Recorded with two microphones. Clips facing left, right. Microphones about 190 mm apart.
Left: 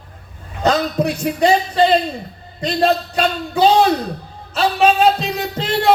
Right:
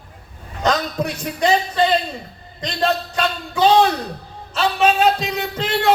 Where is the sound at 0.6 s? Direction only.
30° left (ahead or behind).